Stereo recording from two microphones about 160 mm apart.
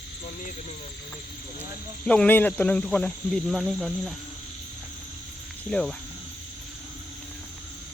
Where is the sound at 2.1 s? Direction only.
10° left (ahead or behind).